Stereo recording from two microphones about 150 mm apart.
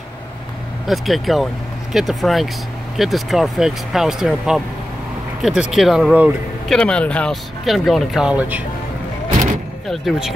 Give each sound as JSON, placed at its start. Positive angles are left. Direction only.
{"t": 0.8, "sound": "speech", "side_deg": 0}
{"t": 5.4, "sound": "speech", "side_deg": -5}
{"t": 6.7, "sound": "speech", "side_deg": 5}
{"t": 9.8, "sound": "speech", "side_deg": 0}